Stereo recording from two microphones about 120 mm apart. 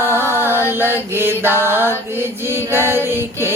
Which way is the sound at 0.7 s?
20° right (ahead or behind).